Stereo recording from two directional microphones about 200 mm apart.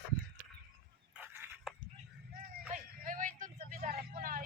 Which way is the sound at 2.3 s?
45° right (ahead or behind).